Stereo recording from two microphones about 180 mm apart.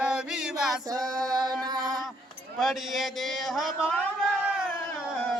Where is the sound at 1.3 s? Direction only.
20° right (ahead or behind).